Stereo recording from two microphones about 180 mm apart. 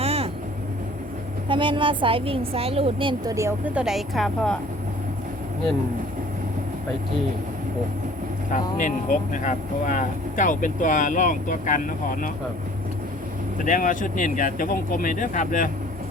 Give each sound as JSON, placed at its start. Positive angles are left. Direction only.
{"t": 0.0, "sound": "vehicle", "side_deg": -35}
{"t": 1.5, "sound": "a woman's voice", "side_deg": -25}
{"t": 3.3, "sound": "a woman's voice", "side_deg": -15}
{"t": 3.8, "sound": "speech", "side_deg": 0}
{"t": 8.4, "sound": "speech", "side_deg": 45}
{"t": 13.7, "sound": "speech", "side_deg": 50}